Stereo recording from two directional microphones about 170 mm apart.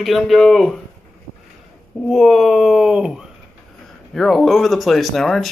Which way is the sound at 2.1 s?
Centre (ahead or behind).